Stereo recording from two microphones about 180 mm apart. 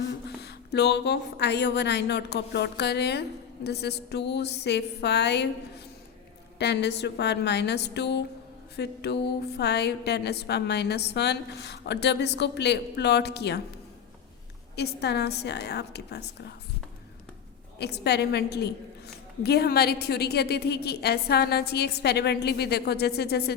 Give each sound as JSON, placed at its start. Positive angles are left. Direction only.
{"t": 0.3, "sound": "speech", "side_deg": 65}
{"t": 6.6, "sound": "speech", "side_deg": 70}
{"t": 8.7, "sound": "mantra", "side_deg": 65}
{"t": 9.6, "sound": "speech", "side_deg": 65}
{"t": 14.8, "sound": "speech", "side_deg": 65}
{"t": 17.7, "sound": "a woman's voice", "side_deg": 65}